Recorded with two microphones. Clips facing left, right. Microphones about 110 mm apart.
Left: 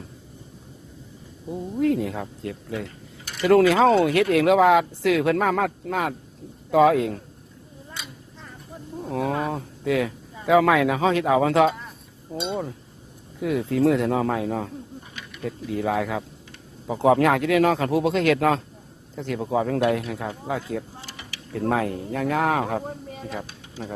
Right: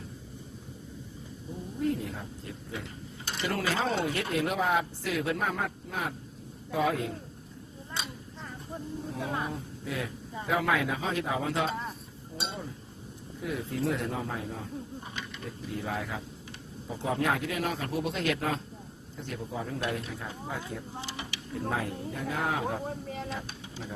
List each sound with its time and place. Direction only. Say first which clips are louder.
1.8 s speech: left 8 dB; 90° left
8.0 s a sound: right 2 dB; 30° right (ahead or behind)
9.0 s speech: left 10 dB; 90° left
13.4 s speech: left 11 dB; 90° left
15.7 s speech: left 10 dB; 90° left
16.8 s speech: left 11 dB; 75° left (ahead or behind)
19.1 s speech: left 12 dB; 90° left
21.0 s a sound: right 2 dB; 20° right (ahead or behind)
21.7 s speech: left 9 dB; 80° left